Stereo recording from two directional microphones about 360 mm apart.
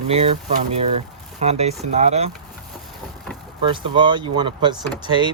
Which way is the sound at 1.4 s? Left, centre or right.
Centre.